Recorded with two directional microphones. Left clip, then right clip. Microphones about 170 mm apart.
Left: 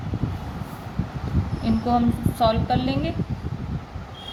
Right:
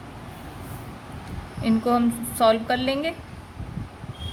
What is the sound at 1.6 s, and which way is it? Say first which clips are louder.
A woman's voice: even; 50° right (ahead or behind).